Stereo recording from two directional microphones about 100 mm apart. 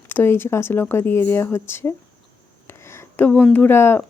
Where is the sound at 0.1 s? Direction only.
20° left (ahead or behind).